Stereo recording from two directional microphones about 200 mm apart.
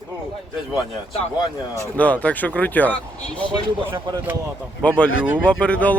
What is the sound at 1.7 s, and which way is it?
Speech, 10° left (ahead or behind).